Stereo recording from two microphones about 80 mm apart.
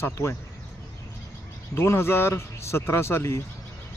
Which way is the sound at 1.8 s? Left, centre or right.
Left.